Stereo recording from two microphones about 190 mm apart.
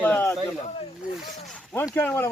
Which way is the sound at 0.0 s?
10° left (ahead or behind).